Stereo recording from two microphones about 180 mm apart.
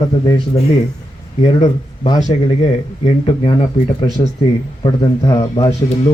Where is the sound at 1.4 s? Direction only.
25° left (ahead or behind).